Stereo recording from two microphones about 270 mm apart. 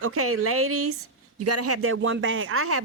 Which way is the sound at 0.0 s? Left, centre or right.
Right.